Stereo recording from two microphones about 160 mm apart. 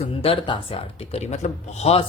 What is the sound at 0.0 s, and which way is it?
Speech, 40° left (ahead or behind).